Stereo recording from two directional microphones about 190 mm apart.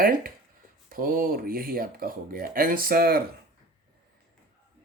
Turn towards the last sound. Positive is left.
turn(degrees=-50)  # may be behind; listen again after turning